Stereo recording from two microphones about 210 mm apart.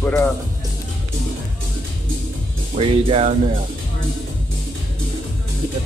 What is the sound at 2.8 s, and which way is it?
Speech, 25° right (ahead or behind).